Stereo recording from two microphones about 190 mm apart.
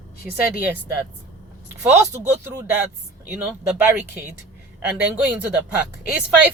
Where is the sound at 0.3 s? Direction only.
10° right (ahead or behind).